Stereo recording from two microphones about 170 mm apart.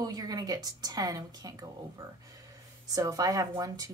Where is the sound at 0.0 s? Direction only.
20° right (ahead or behind).